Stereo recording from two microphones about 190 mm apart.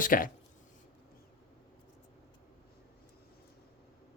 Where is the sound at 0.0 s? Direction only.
45° left (ahead or behind).